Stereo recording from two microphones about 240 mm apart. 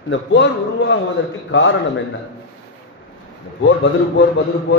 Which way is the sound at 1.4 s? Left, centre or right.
Left.